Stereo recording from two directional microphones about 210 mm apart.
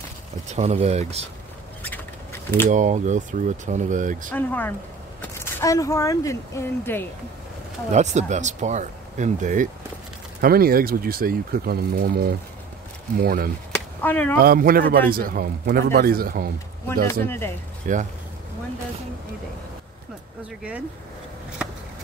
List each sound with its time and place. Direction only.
0.6 s speech: 30° right (ahead or behind)
1.8 s a sound: 10° left (ahead or behind)
2.7 s speech: 35° right (ahead or behind)
4.3 s speech: 10° left (ahead or behind)
7.9 s speech: 35° right (ahead or behind)
13.7 s a sound: 10° left (ahead or behind)
14.4 s speech: 45° right (ahead or behind)
17.1 s speech: 10° left (ahead or behind)
17.9 s speech: 35° right (ahead or behind)